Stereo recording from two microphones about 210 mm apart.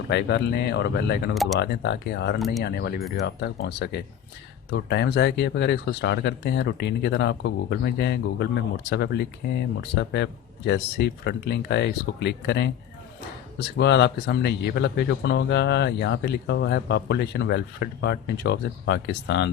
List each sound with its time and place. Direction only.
0.1 s speech: 55° left (ahead or behind)